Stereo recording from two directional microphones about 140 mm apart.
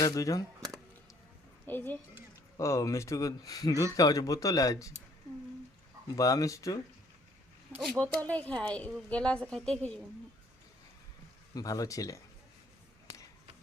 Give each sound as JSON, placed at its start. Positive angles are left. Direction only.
{"t": 0.0, "sound": "speech", "side_deg": 25}
{"t": 1.6, "sound": "a child's voice", "side_deg": 15}
{"t": 6.1, "sound": "speech", "side_deg": 25}
{"t": 7.9, "sound": "a woman's voice", "side_deg": 10}
{"t": 11.5, "sound": "speech", "side_deg": 25}